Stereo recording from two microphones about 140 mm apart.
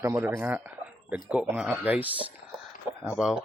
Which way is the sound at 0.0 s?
20° right (ahead or behind).